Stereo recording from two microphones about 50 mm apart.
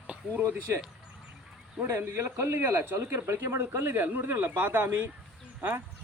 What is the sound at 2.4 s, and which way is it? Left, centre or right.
Speech, right.